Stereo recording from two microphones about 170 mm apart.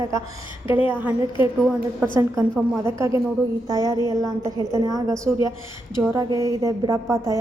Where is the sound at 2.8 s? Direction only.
15° right (ahead or behind).